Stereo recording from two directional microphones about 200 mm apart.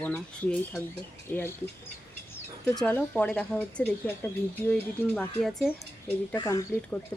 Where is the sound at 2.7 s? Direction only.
10° left (ahead or behind).